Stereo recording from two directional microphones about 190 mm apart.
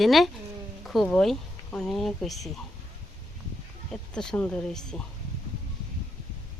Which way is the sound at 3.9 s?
5° left (ahead or behind).